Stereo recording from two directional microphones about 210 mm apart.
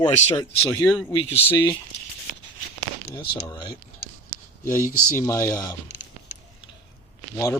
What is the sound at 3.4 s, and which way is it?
Speech, 20° left (ahead or behind).